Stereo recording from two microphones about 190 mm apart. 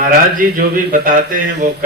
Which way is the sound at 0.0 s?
45° right (ahead or behind).